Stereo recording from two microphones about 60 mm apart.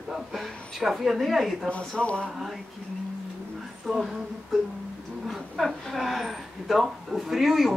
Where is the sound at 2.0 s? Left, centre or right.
Centre.